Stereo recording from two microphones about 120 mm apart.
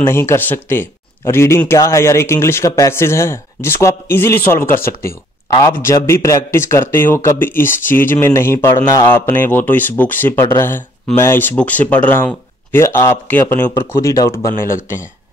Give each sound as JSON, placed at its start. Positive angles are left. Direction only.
{"t": 0.0, "sound": "speech", "side_deg": 20}